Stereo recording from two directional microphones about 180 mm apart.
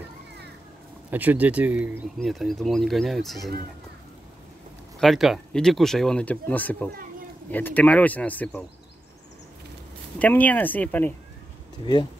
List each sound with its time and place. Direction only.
1.1 s speech: 10° right (ahead or behind)
5.0 s speech: centre (ahead or behind)
10.1 s speech: 10° left (ahead or behind)
11.8 s speech: 25° left (ahead or behind)